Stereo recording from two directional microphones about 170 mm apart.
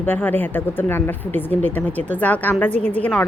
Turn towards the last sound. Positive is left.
turn(degrees=10)  # may be behind; listen again after turning